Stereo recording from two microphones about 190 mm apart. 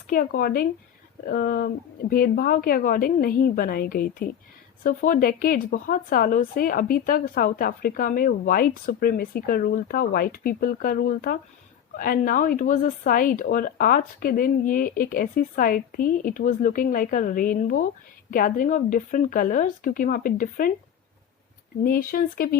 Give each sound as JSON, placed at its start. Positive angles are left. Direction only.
{"t": 0.1, "sound": "speech", "side_deg": 50}
{"t": 21.8, "sound": "speech", "side_deg": 50}